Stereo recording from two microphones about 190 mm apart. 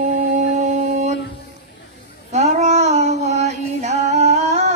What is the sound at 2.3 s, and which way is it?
Female singing, 35° right (ahead or behind).